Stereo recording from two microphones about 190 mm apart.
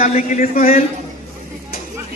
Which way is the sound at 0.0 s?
35° left (ahead or behind).